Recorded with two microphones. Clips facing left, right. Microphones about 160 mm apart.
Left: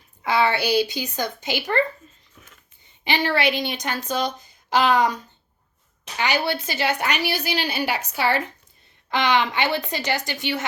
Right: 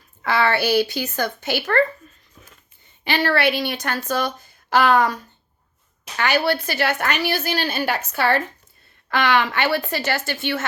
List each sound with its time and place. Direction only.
0.2 s a woman's voice: 15° left (ahead or behind)